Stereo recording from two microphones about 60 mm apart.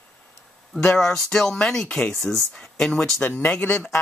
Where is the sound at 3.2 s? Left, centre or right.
Left.